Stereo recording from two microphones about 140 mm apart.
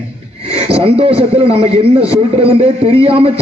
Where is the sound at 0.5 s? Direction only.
45° right (ahead or behind).